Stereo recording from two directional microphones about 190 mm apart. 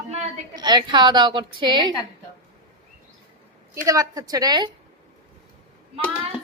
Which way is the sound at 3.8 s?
20° right (ahead or behind).